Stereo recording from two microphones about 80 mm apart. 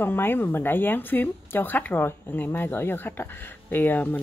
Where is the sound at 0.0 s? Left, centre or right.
Left.